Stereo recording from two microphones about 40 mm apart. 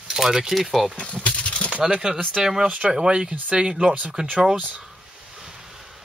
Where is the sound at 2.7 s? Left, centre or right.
Right.